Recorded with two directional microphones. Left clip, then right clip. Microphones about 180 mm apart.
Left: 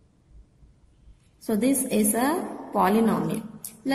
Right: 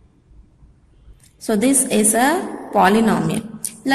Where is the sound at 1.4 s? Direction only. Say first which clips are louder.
Right 7 dB; 15° right (ahead or behind).